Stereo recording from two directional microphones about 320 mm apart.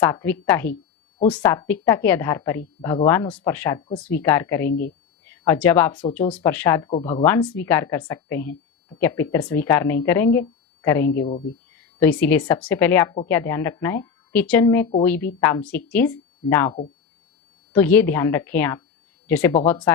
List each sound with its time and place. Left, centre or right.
0.0 s a woman's voice: centre
4.7 s speech: left
5.2 s a woman's voice: centre